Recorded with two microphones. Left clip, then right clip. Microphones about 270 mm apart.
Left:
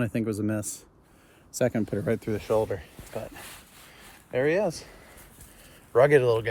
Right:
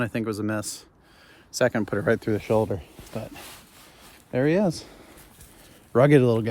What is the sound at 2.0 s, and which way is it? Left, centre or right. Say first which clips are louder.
Speech: right 5 dB; right.